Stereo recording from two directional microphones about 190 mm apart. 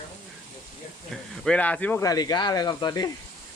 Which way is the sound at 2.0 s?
20° left (ahead or behind).